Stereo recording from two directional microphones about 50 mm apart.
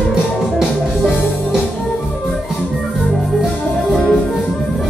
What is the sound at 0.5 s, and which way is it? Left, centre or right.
Music, centre.